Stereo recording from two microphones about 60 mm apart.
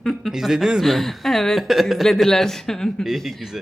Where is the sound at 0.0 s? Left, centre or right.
Centre.